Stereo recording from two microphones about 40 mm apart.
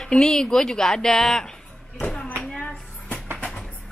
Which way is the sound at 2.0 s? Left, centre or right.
Left.